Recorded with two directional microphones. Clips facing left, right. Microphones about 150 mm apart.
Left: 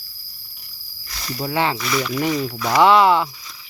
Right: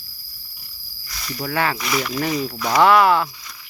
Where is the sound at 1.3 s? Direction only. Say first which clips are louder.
Left 1 dB; 20° left (ahead or behind).